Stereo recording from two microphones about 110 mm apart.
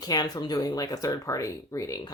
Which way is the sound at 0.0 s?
35° left (ahead or behind).